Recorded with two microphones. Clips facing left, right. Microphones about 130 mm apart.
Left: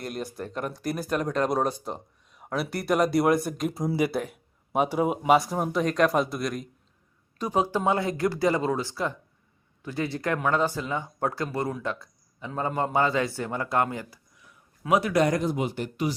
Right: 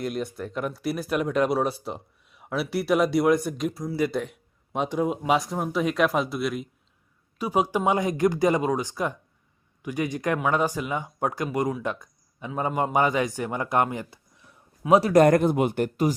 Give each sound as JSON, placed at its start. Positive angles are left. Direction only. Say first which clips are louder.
{"t": 0.0, "sound": "a man's voice", "louder": "right 4 dB", "side_deg": 0}
{"t": 15.1, "sound": "speech", "louder": "right 6 dB", "side_deg": -55}